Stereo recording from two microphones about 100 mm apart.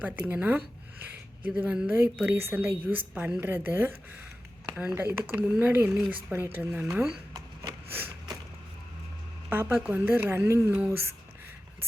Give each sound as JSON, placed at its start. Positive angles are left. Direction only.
{"t": 0.0, "sound": "speech", "side_deg": -15}
{"t": 4.7, "sound": "speech", "side_deg": -10}
{"t": 4.9, "sound": "speech", "side_deg": -20}
{"t": 7.3, "sound": "a sound", "side_deg": -40}
{"t": 9.5, "sound": "speech", "side_deg": -20}